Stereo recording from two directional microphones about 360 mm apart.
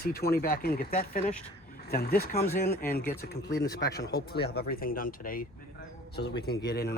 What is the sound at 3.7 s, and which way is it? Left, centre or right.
Speech, left.